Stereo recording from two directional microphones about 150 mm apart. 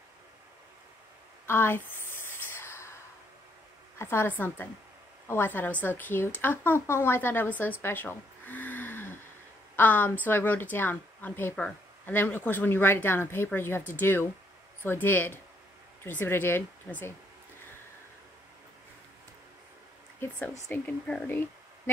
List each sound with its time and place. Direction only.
1.4 s a sound: 15° left (ahead or behind)
4.0 s a woman's voice: 15° left (ahead or behind)
20.2 s speech: 10° left (ahead or behind)